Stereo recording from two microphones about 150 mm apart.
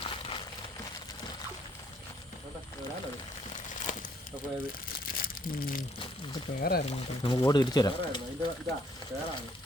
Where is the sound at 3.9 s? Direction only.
60° left (ahead or behind).